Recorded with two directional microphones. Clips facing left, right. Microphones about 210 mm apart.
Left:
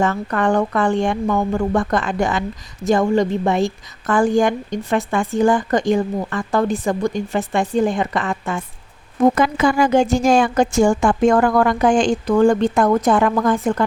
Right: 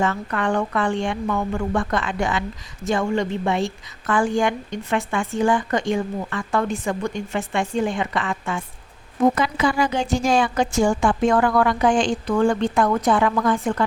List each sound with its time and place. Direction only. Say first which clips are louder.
0.0 s a woman's voice: left 4 dB; 45° left (ahead or behind)